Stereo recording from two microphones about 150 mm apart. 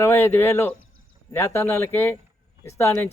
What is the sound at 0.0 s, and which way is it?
A man's voice, 15° left (ahead or behind).